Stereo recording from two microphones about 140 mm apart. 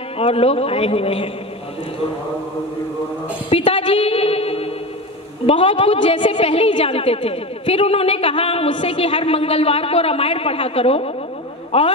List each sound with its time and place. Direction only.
0.2 s a woman's voice: 45° left (ahead or behind)
3.4 s a sound: 40° left (ahead or behind)
5.5 s a woman's voice: 40° left (ahead or behind)